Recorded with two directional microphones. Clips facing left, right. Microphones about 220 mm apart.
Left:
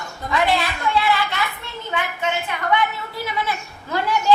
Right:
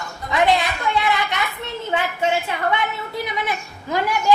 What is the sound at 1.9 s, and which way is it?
A woman's voice, 30° right (ahead or behind).